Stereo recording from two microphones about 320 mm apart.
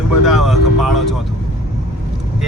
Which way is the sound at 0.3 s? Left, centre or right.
Centre.